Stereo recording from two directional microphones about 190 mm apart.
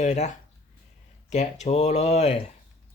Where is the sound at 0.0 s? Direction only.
35° left (ahead or behind).